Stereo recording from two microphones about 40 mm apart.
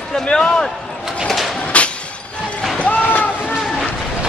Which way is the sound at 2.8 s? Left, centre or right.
Left.